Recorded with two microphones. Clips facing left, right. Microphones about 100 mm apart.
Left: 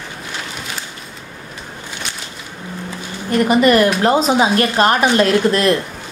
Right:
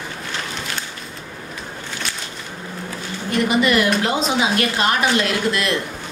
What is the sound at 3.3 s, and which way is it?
A woman's voice, 45° left (ahead or behind).